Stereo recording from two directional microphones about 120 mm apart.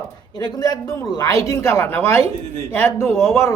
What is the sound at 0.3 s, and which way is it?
A man's voice, 35° left (ahead or behind).